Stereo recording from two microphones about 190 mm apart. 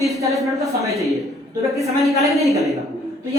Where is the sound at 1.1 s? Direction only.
15° right (ahead or behind).